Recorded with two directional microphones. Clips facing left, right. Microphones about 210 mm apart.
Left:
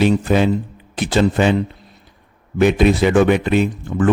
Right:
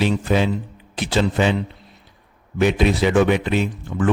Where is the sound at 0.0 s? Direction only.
50° left (ahead or behind).